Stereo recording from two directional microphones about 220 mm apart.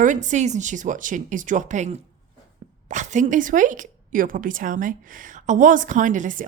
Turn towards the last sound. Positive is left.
turn(degrees=-35)  # may be behind; listen again after turning